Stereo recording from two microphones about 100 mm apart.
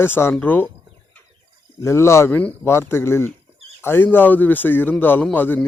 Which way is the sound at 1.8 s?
30° left (ahead or behind).